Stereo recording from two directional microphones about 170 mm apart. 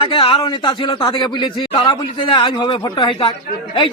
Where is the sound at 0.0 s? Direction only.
30° left (ahead or behind).